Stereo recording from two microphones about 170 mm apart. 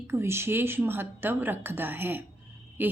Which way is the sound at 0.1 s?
15° right (ahead or behind).